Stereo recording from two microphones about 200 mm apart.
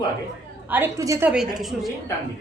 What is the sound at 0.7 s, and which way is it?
Speech, 15° right (ahead or behind).